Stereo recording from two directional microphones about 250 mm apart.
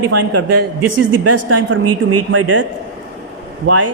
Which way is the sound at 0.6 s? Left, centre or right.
Right.